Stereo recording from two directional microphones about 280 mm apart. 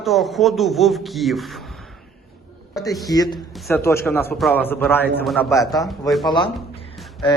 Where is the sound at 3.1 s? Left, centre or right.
Centre.